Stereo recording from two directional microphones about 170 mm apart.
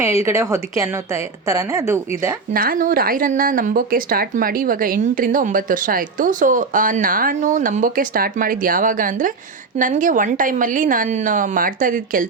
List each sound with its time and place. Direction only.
0.0 s a woman's voice: 15° right (ahead or behind)
2.5 s speech: 55° right (ahead or behind)